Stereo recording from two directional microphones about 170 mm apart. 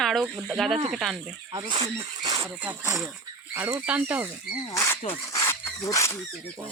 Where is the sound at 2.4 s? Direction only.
10° right (ahead or behind).